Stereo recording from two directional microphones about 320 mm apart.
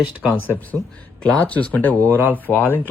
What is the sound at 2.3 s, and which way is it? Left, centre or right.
Speech, centre.